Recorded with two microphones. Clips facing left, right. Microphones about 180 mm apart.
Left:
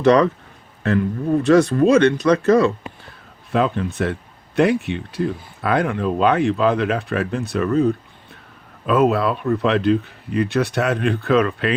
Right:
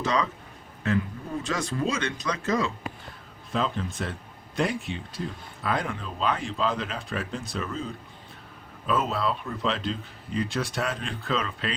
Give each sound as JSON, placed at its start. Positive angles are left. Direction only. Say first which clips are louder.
{"t": 0.0, "sound": "speech", "louder": "left 13 dB", "side_deg": 65}